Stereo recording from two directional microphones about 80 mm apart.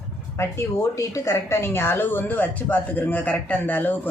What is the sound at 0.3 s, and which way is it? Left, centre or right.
Speech, left.